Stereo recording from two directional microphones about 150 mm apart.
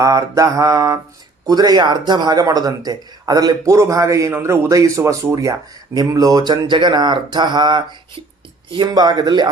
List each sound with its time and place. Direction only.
0.0 s speech: 25° right (ahead or behind)